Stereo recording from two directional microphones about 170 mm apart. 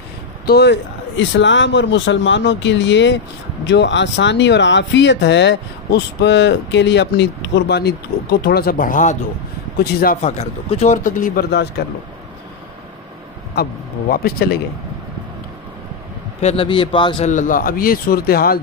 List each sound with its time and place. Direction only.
0.5 s speech: 85° left; by 9.2 s 50° left (ahead or behind)
10.2 s speech: 40° left (ahead or behind)
11.5 s speech: 80° left
13.6 s a man's voice: 60° left (ahead or behind)
16.3 s a man's voice: 35° left (ahead or behind)
17.3 s a man's voice: 50° left (ahead or behind)